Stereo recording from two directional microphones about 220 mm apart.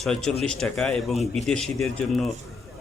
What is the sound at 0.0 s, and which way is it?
Speech, centre (ahead or behind).